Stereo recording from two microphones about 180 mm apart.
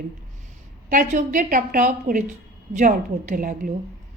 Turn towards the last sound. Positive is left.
turn(degrees=-50)  # may be behind; listen again after turning